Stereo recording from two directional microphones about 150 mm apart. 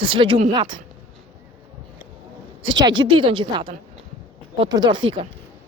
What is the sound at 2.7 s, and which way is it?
Speech, 30° right (ahead or behind).